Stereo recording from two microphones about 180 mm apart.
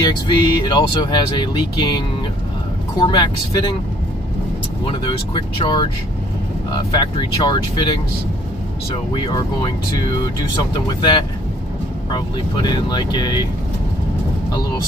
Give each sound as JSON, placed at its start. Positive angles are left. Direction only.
{"t": 0.0, "sound": "speech", "side_deg": 25}
{"t": 4.8, "sound": "speech", "side_deg": 25}
{"t": 6.9, "sound": "speech", "side_deg": 20}
{"t": 8.9, "sound": "speech", "side_deg": 25}
{"t": 12.6, "sound": "speech", "side_deg": 25}